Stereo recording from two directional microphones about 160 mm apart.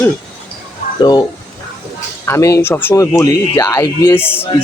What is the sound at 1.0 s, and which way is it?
Speech, 25° left (ahead or behind).